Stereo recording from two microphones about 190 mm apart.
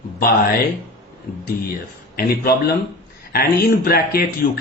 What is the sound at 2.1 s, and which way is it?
Speech, 55° left (ahead or behind).